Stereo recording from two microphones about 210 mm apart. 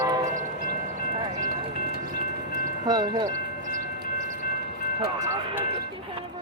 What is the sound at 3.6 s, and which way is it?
Train, 35° right (ahead or behind).